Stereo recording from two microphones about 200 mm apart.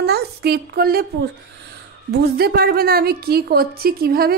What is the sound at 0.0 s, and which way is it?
A woman's voice, 55° right (ahead or behind).